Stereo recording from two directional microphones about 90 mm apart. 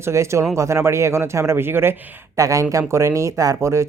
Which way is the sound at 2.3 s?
35° right (ahead or behind).